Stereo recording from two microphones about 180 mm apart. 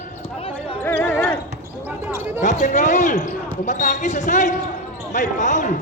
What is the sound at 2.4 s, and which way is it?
Speech, 45° left (ahead or behind).